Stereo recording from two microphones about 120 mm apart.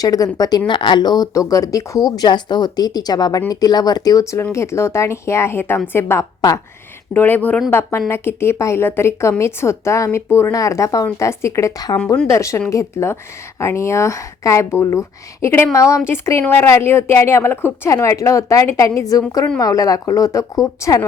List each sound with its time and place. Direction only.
0.0 s a woman's voice: 30° left (ahead or behind)
7.1 s a woman's voice: 15° left (ahead or behind)